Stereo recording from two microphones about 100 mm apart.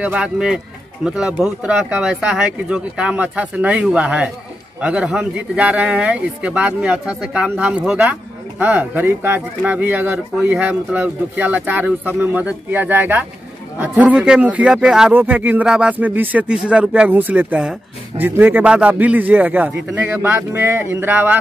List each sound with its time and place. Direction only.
0.0 s speech: 10° right (ahead or behind)
8.5 s speech: 20° right (ahead or behind)